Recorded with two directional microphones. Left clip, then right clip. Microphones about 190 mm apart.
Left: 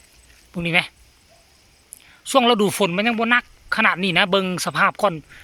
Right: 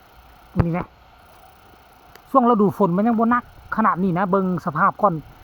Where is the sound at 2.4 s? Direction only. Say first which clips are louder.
Even; 25° left (ahead or behind).